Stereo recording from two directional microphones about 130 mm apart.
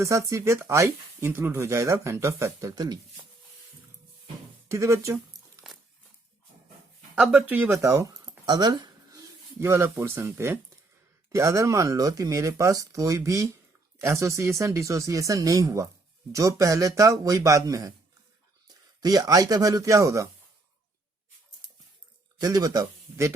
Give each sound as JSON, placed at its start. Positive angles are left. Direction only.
{"t": 0.0, "sound": "speech", "side_deg": -25}
{"t": 4.7, "sound": "a sound", "side_deg": -25}
{"t": 7.2, "sound": "speech", "side_deg": -10}
{"t": 19.0, "sound": "speech", "side_deg": -30}
{"t": 22.4, "sound": "speech", "side_deg": -30}